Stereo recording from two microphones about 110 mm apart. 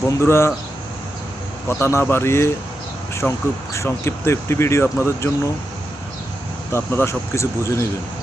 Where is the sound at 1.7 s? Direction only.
25° left (ahead or behind).